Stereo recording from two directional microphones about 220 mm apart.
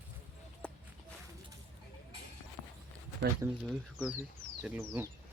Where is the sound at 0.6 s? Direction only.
5° left (ahead or behind).